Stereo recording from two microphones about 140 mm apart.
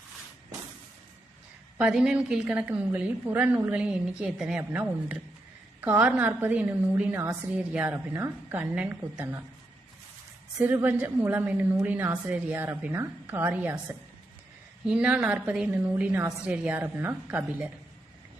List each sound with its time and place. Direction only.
1.8 s a woman's voice: 5° right (ahead or behind)
10.6 s a woman's voice: 15° right (ahead or behind)
14.8 s a woman's voice: 10° right (ahead or behind)